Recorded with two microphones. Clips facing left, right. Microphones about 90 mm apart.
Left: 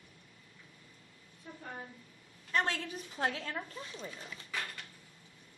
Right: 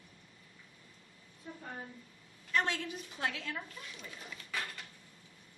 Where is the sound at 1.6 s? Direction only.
Centre (ahead or behind).